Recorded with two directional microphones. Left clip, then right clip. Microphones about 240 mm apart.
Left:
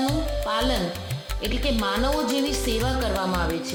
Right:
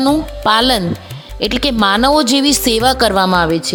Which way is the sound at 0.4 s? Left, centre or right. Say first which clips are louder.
Right 14 dB; right.